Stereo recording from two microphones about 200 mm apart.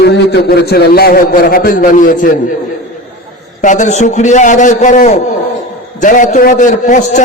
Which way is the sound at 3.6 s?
35° left (ahead or behind).